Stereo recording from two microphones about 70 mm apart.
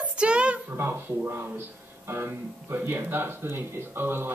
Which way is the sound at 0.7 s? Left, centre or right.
Right.